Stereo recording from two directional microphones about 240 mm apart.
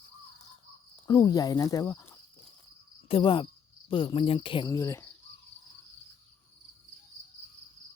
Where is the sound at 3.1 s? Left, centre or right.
Left.